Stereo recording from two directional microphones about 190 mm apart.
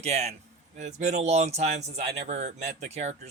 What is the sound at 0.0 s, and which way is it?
Speech, 35° right (ahead or behind).